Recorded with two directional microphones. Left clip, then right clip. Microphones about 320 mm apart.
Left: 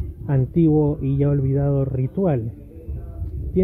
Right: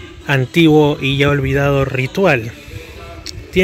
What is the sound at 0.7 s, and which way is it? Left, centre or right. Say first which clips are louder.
Speech: right 9 dB; right.